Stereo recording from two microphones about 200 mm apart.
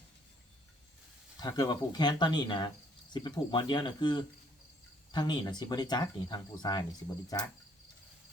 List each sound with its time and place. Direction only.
1.4 s speech: 20° left (ahead or behind)
7.3 s cricket: 20° left (ahead or behind)